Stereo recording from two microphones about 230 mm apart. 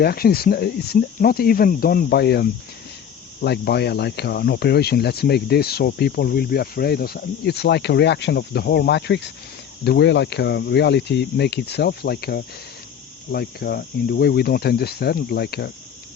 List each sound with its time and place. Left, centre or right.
0.0 s speech: left